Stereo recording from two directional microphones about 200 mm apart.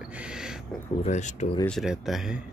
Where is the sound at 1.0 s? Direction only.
35° left (ahead or behind).